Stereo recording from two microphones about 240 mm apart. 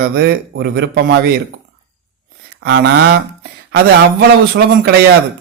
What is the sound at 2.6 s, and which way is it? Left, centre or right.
Speech, right.